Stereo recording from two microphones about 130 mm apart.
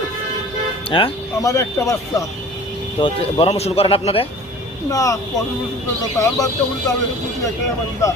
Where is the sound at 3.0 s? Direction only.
40° left (ahead or behind).